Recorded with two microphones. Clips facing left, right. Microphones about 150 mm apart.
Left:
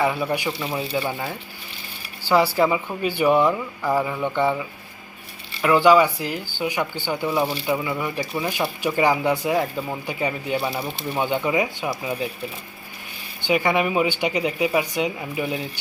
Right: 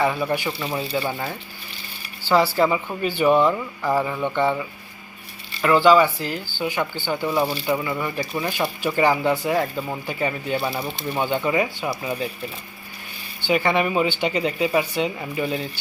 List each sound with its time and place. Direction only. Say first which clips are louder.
0.0 s speech: even; 10° left (ahead or behind)
5.6 s speech: even; 15° left (ahead or behind)
13.4 s speech: even; 15° left (ahead or behind)